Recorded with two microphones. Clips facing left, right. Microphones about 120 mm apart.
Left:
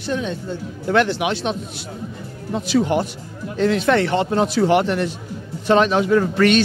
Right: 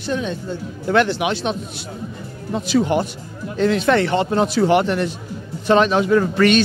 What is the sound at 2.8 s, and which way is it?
A man's voice, 30° right (ahead or behind).